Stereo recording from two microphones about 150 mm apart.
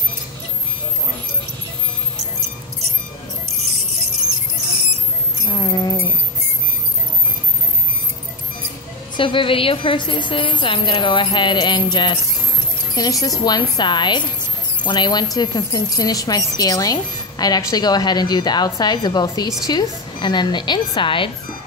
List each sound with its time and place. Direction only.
5.5 s music: 30° left (ahead or behind)
9.1 s a woman's voice: 35° left (ahead or behind)